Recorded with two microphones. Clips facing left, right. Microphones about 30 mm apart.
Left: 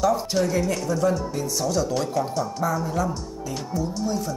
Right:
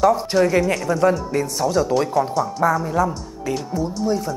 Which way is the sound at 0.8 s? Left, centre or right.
Right.